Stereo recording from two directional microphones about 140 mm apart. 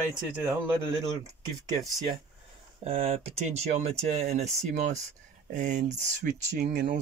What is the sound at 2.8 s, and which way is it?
Speech, 50° right (ahead or behind).